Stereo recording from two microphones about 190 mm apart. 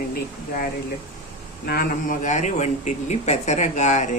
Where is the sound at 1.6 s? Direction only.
50° left (ahead or behind).